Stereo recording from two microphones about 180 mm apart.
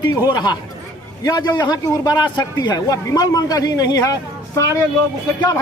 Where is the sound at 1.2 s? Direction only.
25° left (ahead or behind).